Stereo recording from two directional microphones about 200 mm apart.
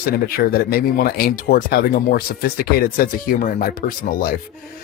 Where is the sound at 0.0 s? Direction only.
50° left (ahead or behind).